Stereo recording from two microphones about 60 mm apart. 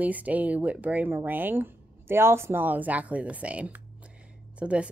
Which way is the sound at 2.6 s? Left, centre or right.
Right.